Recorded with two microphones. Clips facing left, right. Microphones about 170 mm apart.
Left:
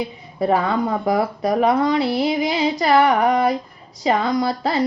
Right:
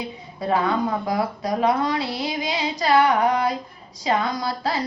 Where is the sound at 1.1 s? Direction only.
25° left (ahead or behind).